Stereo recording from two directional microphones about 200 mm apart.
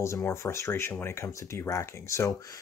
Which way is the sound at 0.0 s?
15° left (ahead or behind).